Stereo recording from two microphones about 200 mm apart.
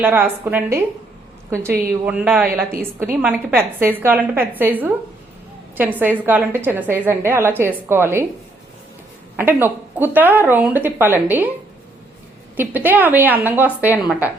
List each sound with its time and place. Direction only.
0.0 s a woman's voice: 10° right (ahead or behind)
2.0 s a woman's voice: 5° right (ahead or behind)
9.3 s a woman's voice: 10° right (ahead or behind)
12.5 s a woman's voice: 10° right (ahead or behind)